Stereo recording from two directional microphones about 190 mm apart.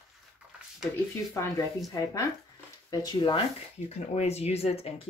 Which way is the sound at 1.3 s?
15° left (ahead or behind).